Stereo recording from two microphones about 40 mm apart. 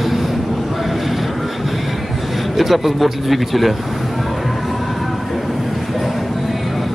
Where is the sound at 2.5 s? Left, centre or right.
Centre.